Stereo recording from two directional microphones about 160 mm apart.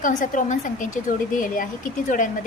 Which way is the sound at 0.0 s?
55° left (ahead or behind).